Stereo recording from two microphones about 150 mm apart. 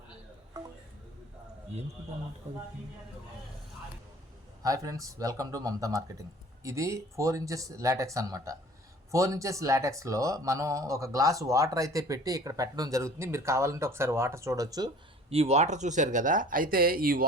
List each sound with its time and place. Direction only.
4.6 s speech: 20° right (ahead or behind)
15.3 s speech: 45° right (ahead or behind); by 17.2 s 75° right (ahead or behind)